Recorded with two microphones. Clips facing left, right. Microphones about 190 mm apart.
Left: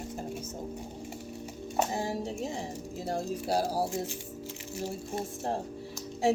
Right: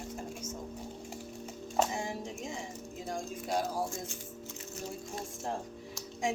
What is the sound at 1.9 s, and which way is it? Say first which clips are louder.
Speech: left 5 dB; 35° left (ahead or behind).